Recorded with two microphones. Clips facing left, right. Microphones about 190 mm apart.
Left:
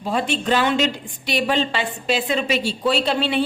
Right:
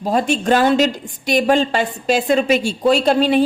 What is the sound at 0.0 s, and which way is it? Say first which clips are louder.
A woman's voice: right 5 dB; 40° right (ahead or behind).